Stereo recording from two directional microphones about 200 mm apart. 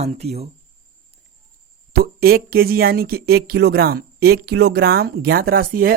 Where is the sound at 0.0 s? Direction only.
30° right (ahead or behind).